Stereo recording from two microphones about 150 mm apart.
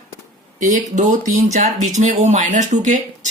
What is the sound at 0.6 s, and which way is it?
Speech, 55° right (ahead or behind).